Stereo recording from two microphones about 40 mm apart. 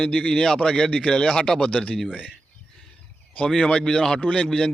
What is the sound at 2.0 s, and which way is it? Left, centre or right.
Speech, right.